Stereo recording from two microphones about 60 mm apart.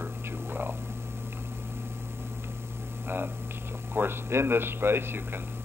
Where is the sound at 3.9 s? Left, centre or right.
Right.